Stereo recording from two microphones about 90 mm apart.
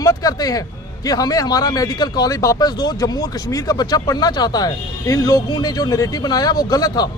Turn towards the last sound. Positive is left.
turn(degrees=45)  # may be behind; listen again after turning